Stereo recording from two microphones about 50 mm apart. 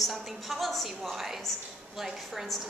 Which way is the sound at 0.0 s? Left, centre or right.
Centre.